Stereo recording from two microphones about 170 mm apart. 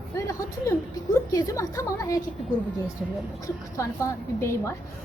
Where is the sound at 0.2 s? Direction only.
20° left (ahead or behind).